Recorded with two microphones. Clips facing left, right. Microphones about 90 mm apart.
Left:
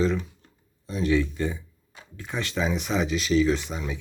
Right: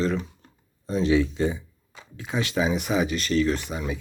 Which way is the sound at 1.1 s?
15° right (ahead or behind).